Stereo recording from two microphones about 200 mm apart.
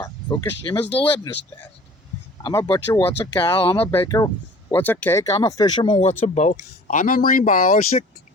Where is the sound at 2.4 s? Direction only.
15° left (ahead or behind).